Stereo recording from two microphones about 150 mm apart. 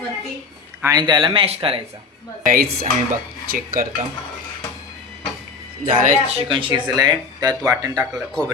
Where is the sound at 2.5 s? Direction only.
90° right.